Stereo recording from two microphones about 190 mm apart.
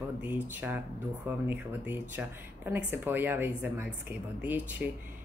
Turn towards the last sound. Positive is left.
turn(degrees=-10)  # may be behind; listen again after turning